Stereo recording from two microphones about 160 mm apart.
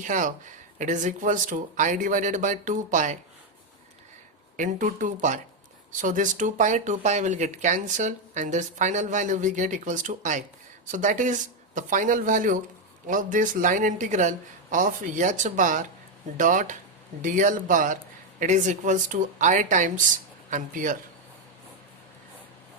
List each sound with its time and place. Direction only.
0.0 s speech: 55° right (ahead or behind)
4.5 s speech: 55° right (ahead or behind)